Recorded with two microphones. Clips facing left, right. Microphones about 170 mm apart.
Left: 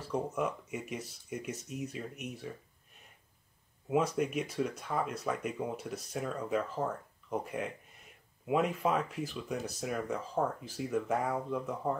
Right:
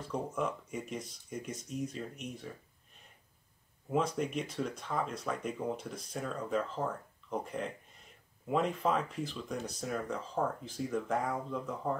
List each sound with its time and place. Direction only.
0.1 s speech: 10° left (ahead or behind)
3.9 s speech: 10° left (ahead or behind)